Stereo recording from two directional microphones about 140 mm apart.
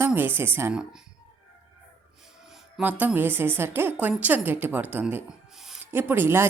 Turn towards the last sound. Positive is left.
turn(degrees=-15)  # may be behind; listen again after turning